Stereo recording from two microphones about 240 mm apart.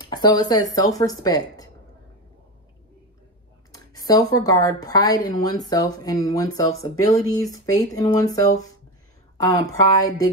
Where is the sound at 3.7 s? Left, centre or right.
Centre.